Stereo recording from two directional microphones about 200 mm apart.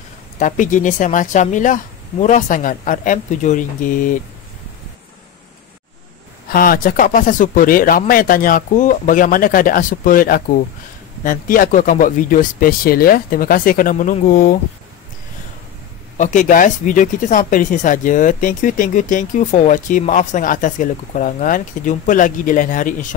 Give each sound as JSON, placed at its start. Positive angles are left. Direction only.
{"t": 0.4, "sound": "speech", "side_deg": 40}
{"t": 6.5, "sound": "speech", "side_deg": 45}
{"t": 16.2, "sound": "speech", "side_deg": 40}